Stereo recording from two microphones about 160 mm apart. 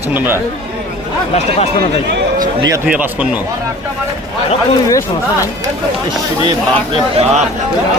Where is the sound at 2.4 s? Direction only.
25° right (ahead or behind).